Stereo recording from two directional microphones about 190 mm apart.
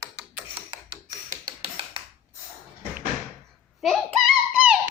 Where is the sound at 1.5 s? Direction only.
30° right (ahead or behind).